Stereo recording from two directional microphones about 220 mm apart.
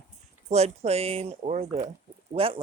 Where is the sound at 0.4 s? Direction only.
30° right (ahead or behind).